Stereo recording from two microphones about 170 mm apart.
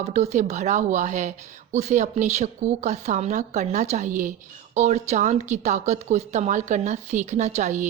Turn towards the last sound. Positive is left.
turn(degrees=-45)  # may be behind; listen again after turning